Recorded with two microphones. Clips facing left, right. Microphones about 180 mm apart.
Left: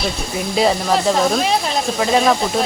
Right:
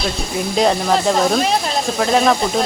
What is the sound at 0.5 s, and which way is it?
Speech, centre (ahead or behind).